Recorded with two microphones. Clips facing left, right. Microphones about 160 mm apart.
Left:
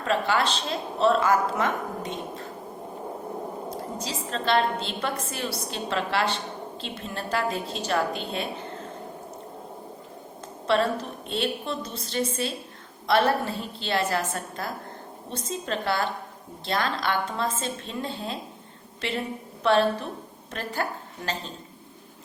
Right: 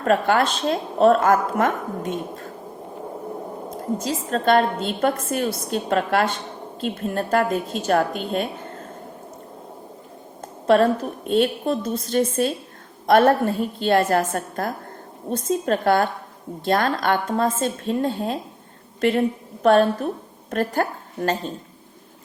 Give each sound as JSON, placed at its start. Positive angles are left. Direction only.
{"t": 0.0, "sound": "a woman's voice", "side_deg": -50}
{"t": 3.7, "sound": "a woman's voice", "side_deg": -50}
{"t": 10.7, "sound": "a woman's voice", "side_deg": -50}